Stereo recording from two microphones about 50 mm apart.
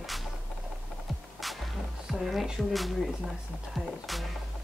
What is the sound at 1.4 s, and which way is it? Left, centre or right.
Music, centre.